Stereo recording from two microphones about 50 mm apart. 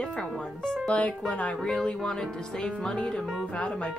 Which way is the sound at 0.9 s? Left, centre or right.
Left.